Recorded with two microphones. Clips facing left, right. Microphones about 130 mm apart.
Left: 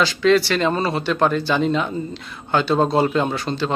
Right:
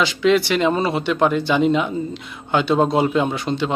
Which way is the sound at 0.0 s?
15° right (ahead or behind).